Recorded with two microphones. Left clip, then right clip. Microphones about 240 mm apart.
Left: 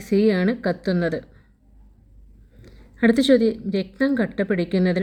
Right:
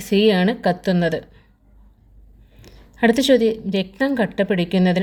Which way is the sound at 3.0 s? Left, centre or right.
Right.